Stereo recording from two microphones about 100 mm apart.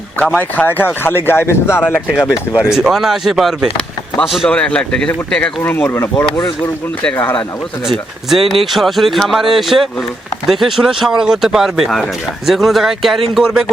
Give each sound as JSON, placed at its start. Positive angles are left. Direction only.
{"t": 0.5, "sound": "speech", "side_deg": 20}
{"t": 2.5, "sound": "speech", "side_deg": -5}
{"t": 4.4, "sound": "speech", "side_deg": 10}
{"t": 5.7, "sound": "speech", "side_deg": 20}
{"t": 7.9, "sound": "speech", "side_deg": 0}